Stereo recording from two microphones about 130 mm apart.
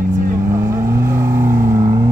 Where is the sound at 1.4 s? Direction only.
20° right (ahead or behind).